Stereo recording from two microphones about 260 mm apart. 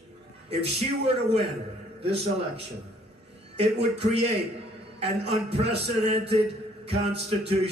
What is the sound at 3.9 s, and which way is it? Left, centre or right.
A man's voice, right.